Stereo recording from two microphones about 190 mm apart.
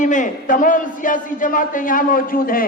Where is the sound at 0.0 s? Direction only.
40° left (ahead or behind).